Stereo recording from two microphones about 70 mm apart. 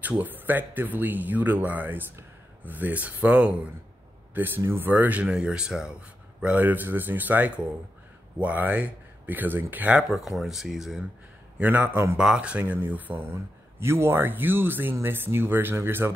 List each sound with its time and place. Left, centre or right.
0.2 s speech: right
5.3 s speech: centre
6.4 s speech: right
10.0 s speech: centre
11.5 s speech: right
12.2 s speech: centre
13.3 s speech: right